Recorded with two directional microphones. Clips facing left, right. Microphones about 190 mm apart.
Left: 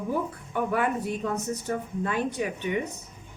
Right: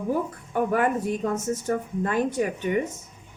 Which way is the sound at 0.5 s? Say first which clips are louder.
Right 3 dB; 45° right (ahead or behind).